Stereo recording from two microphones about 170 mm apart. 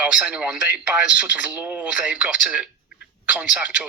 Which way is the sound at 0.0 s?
5° right (ahead or behind).